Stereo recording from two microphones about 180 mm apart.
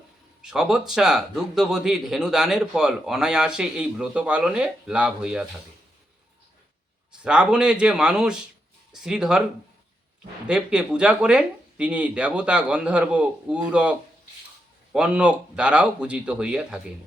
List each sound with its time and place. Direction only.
0.5 s a man's voice: 5° right (ahead or behind)
7.2 s a man's voice: 5° right (ahead or behind)
10.4 s a man's voice: 5° right (ahead or behind)
14.9 s a man's voice: 5° right (ahead or behind)